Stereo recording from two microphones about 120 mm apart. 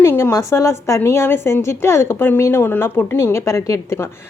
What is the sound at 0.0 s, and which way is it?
A woman's voice, 20° left (ahead or behind).